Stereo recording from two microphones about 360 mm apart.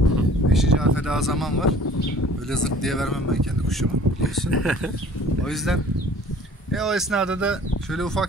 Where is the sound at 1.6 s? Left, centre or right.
Left.